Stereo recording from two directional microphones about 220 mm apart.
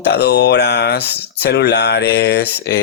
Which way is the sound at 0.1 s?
50° left (ahead or behind).